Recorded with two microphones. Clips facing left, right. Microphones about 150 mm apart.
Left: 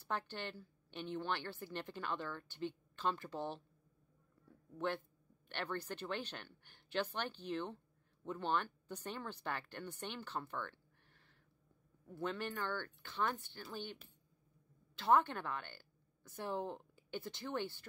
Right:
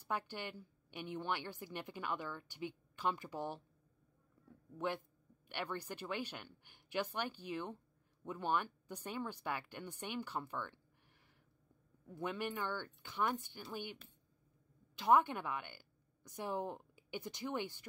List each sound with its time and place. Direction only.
0.0 s a woman's voice: 10° right (ahead or behind)
4.7 s a woman's voice: 15° right (ahead or behind)
15.0 s speech: 15° right (ahead or behind)